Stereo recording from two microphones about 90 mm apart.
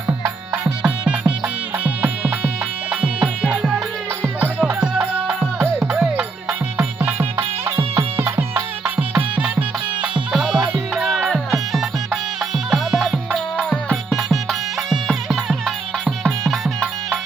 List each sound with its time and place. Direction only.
0.6 s music: 15° right (ahead or behind)
7.0 s music: 25° right (ahead or behind)
8.8 s music: 10° right (ahead or behind)
9.6 s music: 65° right (ahead or behind)
10.3 s music: 5° right (ahead or behind)